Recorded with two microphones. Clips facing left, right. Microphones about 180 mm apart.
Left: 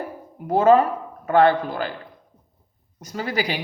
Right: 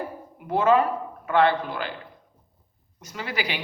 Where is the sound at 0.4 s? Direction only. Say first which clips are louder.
Left 4 dB; 40° left (ahead or behind).